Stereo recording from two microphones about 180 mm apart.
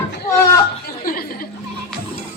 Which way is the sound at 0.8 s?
55° left (ahead or behind).